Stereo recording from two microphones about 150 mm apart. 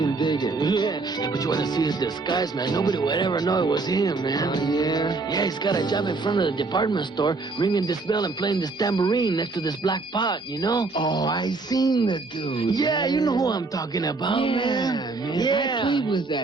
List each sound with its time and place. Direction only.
0.0 s speech: 30° left (ahead or behind)